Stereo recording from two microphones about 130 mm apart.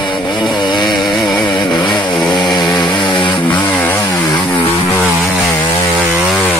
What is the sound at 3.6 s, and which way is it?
Chainsaw, 15° left (ahead or behind).